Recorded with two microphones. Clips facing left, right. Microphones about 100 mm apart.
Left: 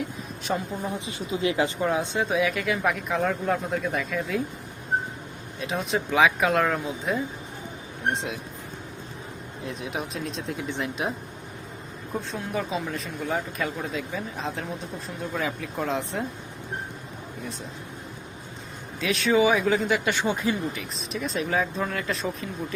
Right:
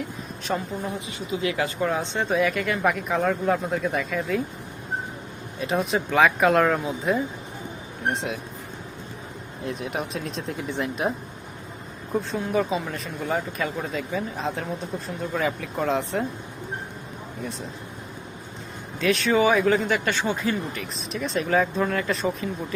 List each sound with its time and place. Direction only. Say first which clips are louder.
0.5 s speech: right 1 dB; 5° left (ahead or behind)
0.9 s speech: even; 30° left (ahead or behind)
1.8 s speech: even; 10° left (ahead or behind)
5.5 s speech: right 3 dB; centre (ahead or behind)
9.6 s speech: right 3 dB; centre (ahead or behind)
12.3 s speech: right 5 dB; centre (ahead or behind)
18.9 s speech: right 1 dB; centre (ahead or behind)
20.1 s speech: even; 15° left (ahead or behind)
20.7 s speech: right 2 dB; centre (ahead or behind)